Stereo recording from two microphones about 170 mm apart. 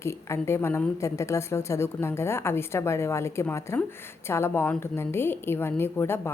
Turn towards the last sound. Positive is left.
turn(degrees=15)  # may be behind; listen again after turning